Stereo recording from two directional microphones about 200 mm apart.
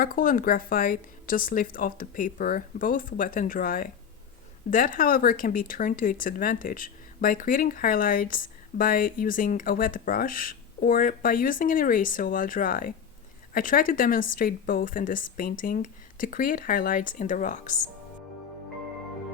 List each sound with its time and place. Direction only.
0.0 s speech: 45° left (ahead or behind)